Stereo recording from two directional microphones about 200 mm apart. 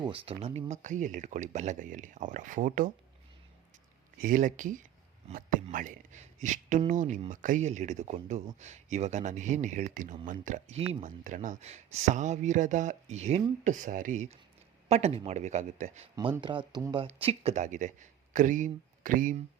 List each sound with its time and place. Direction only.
0.0 s speech: 25° right (ahead or behind)
4.2 s speech: 40° right (ahead or behind)
16.1 s speech: 20° right (ahead or behind); by 19.4 s 40° right (ahead or behind)